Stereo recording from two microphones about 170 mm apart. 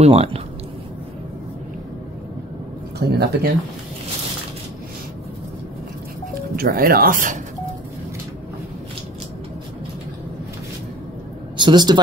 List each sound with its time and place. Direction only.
0.0 s speech: 35° right (ahead or behind)
3.0 s speech: 70° right (ahead or behind)
6.5 s speech: 60° right (ahead or behind)
11.5 s a man's voice: 25° right (ahead or behind)